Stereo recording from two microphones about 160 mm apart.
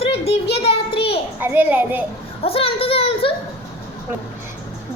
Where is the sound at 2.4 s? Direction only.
35° left (ahead or behind).